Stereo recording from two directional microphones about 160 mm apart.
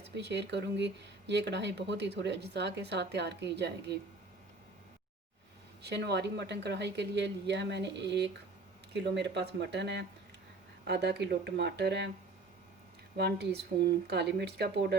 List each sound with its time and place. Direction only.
0.1 s speech: 90° right
5.8 s speech: 90° right
13.1 s speech: 90° right